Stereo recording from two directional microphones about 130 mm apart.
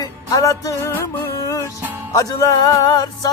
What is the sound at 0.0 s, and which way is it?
Music, 30° left (ahead or behind).